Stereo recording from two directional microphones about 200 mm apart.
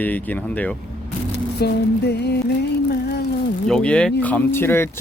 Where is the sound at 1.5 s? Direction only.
55° left (ahead or behind).